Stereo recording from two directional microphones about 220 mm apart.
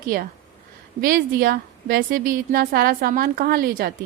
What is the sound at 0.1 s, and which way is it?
A woman's voice, 40° right (ahead or behind).